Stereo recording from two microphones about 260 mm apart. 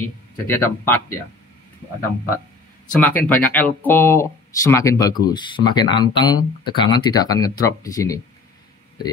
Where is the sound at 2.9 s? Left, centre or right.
Centre.